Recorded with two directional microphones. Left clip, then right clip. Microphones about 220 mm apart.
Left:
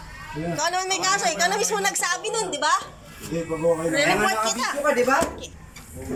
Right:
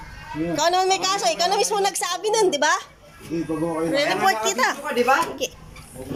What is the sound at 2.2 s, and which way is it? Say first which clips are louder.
Speech: right 6 dB; 25° right (ahead or behind).